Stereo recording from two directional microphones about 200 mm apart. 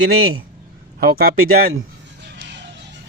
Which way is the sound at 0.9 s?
50° right (ahead or behind).